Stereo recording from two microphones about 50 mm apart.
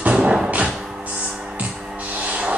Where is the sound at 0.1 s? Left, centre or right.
Centre.